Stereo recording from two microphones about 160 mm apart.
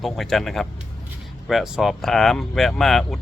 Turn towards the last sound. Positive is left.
turn(degrees=0)  # may be behind; listen again after turning